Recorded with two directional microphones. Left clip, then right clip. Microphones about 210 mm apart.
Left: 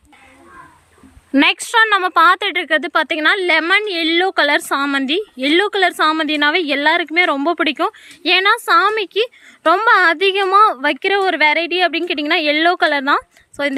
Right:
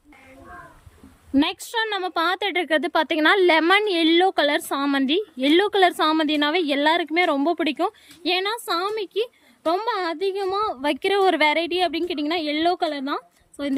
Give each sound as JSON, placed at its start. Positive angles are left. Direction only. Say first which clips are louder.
{"t": 1.3, "sound": "speech", "louder": "left 9 dB", "side_deg": 0}
{"t": 10.2, "sound": "a woman's voice", "louder": "left 10 dB", "side_deg": 25}
{"t": 10.4, "sound": "a woman's voice", "louder": "left 13 dB", "side_deg": 0}